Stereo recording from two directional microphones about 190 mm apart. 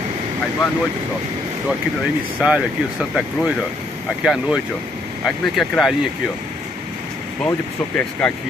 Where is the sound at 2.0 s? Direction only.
5° right (ahead or behind).